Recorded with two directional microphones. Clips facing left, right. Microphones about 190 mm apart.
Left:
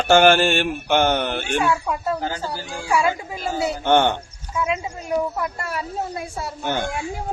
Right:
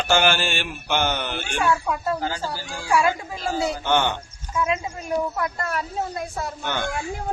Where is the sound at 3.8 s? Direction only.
55° left (ahead or behind).